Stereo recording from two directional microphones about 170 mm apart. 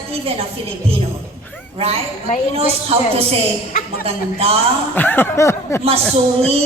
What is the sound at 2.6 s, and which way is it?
A man's voice, 35° right (ahead or behind).